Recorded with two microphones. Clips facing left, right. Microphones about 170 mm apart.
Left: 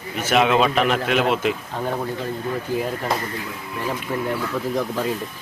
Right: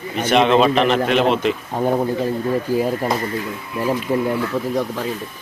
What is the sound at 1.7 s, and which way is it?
Speech, 30° right (ahead or behind).